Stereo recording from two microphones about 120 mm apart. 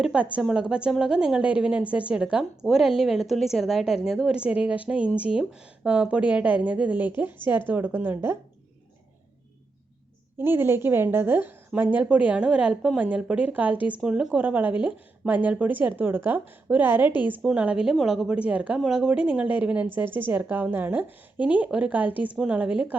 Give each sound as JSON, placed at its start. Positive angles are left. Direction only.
{"t": 0.0, "sound": "a woman's voice", "side_deg": -5}
{"t": 10.3, "sound": "a woman's voice", "side_deg": -20}